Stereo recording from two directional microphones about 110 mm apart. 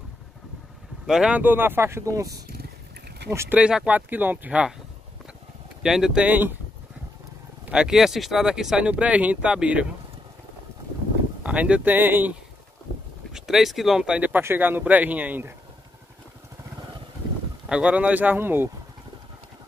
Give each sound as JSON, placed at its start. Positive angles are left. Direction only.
{"t": 1.0, "sound": "speech", "side_deg": -5}
{"t": 3.5, "sound": "speech", "side_deg": -10}
{"t": 5.8, "sound": "speech", "side_deg": -5}
{"t": 7.7, "sound": "speech", "side_deg": -5}
{"t": 11.4, "sound": "speech", "side_deg": -10}
{"t": 13.3, "sound": "speech", "side_deg": -5}
{"t": 17.6, "sound": "speech", "side_deg": -10}